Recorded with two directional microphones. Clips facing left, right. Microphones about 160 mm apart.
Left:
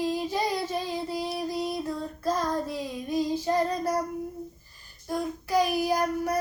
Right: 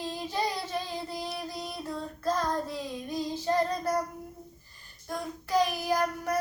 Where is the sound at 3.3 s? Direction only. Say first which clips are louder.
Left 2 dB; 10° left (ahead or behind).